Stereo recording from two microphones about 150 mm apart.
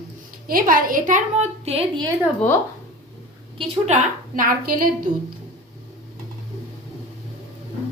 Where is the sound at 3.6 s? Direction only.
45° right (ahead or behind).